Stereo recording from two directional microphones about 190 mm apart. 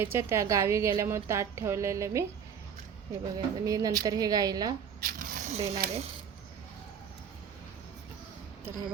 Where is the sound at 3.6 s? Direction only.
20° right (ahead or behind).